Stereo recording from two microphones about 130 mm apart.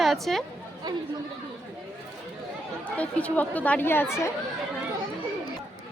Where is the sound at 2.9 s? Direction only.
10° left (ahead or behind).